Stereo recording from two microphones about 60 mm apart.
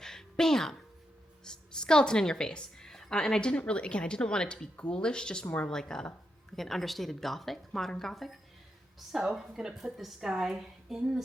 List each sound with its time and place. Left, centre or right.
0.0 s music: centre
1.5 s a woman's voice: centre
3.5 s a woman's voice: centre